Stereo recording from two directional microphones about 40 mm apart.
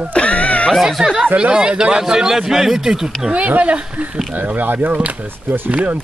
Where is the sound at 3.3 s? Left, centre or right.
Right.